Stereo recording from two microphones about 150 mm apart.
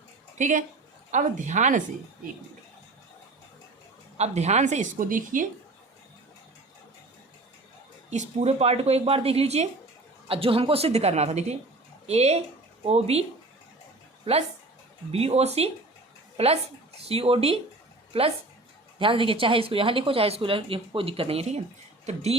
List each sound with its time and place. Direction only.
0.3 s a woman's voice: 55° right (ahead or behind)
4.2 s a woman's voice: 50° right (ahead or behind)
8.1 s a woman's voice: 50° right (ahead or behind)
15.1 s a woman's voice: 45° right (ahead or behind)